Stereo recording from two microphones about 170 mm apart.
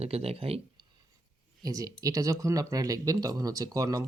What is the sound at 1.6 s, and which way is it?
Speech, 20° right (ahead or behind).